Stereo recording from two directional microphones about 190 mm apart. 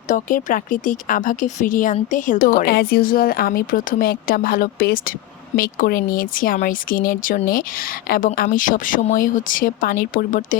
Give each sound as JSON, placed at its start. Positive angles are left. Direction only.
{"t": 0.1, "sound": "speech", "side_deg": 45}